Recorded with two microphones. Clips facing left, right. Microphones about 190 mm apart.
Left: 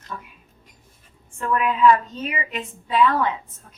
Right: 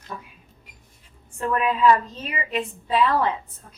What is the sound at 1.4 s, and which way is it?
A woman's voice, 35° right (ahead or behind).